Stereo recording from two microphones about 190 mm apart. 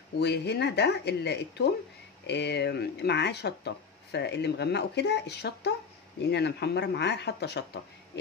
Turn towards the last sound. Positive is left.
turn(degrees=60)  # may be behind; listen again after turning